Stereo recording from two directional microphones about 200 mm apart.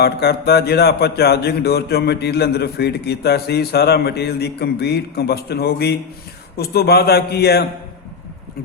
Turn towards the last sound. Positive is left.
turn(degrees=55)  # may be behind; listen again after turning